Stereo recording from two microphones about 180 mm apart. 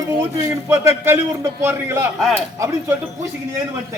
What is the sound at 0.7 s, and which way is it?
A man's voice, 15° right (ahead or behind).